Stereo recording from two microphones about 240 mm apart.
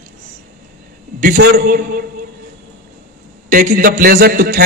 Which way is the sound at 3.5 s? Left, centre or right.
Right.